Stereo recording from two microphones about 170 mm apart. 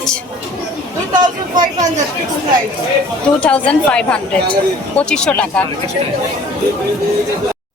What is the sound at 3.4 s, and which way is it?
A woman's voice, 5° left (ahead or behind).